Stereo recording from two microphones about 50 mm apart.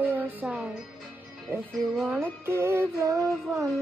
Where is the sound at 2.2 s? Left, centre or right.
Right.